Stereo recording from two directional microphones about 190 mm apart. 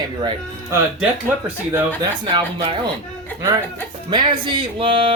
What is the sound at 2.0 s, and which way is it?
Speech, 25° right (ahead or behind).